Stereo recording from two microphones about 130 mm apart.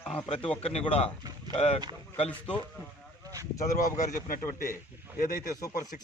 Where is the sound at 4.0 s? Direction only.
90° left.